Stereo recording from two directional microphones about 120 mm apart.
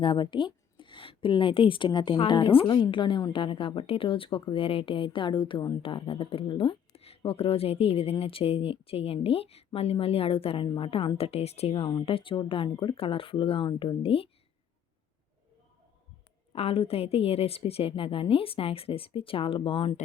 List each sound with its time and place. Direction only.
0.0 s a woman's voice: 45° left (ahead or behind)
12.0 s speech: 50° left (ahead or behind)
16.5 s speech: 55° left (ahead or behind)